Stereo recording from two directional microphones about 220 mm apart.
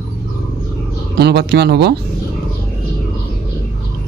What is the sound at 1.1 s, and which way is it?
Speech, 50° right (ahead or behind).